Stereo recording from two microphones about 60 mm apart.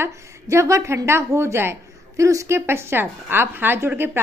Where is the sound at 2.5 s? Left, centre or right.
Right.